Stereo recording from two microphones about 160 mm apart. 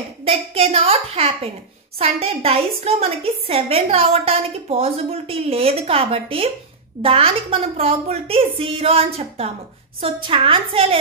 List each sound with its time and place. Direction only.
0.2 s a woman's voice: 35° right (ahead or behind)